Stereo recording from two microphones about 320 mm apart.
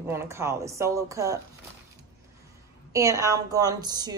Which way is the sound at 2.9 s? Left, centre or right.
Centre.